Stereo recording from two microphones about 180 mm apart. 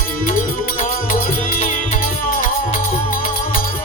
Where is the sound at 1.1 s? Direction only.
50° left (ahead or behind).